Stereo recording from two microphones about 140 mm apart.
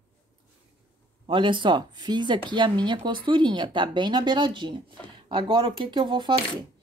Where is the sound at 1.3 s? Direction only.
35° right (ahead or behind).